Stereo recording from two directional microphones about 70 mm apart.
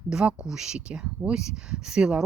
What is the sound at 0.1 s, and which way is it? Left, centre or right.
Speech, centre.